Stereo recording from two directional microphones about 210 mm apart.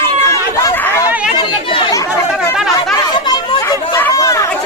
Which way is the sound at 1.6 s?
25° left (ahead or behind).